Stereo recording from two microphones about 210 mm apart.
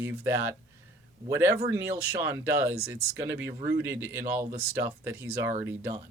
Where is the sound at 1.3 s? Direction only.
15° right (ahead or behind).